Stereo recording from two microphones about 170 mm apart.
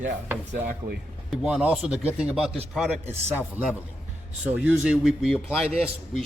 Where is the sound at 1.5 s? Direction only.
5° right (ahead or behind).